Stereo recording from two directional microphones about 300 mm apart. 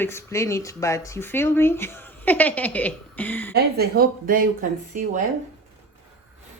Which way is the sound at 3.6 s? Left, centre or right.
Right.